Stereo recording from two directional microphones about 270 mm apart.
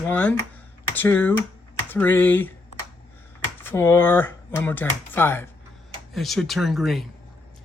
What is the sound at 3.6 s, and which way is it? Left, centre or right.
Speech, centre.